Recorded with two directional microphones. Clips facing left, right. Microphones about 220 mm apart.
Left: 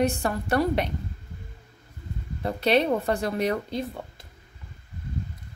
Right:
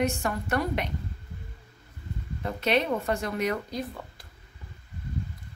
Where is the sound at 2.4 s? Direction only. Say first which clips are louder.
Left 4 dB; 35° left (ahead or behind).